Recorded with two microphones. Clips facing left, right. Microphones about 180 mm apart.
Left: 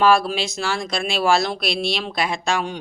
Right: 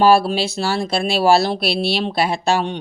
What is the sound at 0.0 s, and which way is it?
Speech, 35° right (ahead or behind).